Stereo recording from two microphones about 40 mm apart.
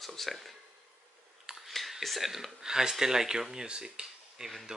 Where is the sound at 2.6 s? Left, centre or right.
Centre.